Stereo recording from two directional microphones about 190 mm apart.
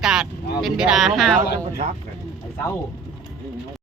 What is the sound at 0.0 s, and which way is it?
Speech, 5° right (ahead or behind).